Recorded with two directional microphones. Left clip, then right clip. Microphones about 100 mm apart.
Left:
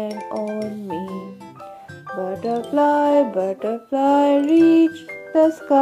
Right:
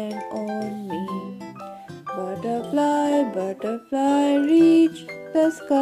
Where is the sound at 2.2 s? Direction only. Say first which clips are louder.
Left 4 dB; 20° right (ahead or behind).